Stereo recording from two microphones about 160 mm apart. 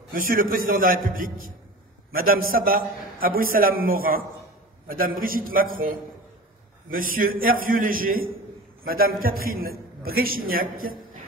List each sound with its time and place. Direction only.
0.1 s a man's voice: 65° right (ahead or behind)